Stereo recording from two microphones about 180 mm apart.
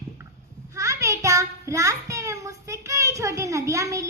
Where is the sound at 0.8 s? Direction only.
15° right (ahead or behind).